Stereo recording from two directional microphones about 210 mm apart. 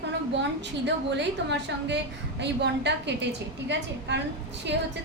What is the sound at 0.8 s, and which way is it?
A woman's voice, 55° right (ahead or behind).